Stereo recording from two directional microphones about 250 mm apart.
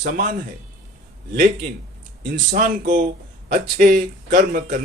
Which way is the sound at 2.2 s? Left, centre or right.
Right.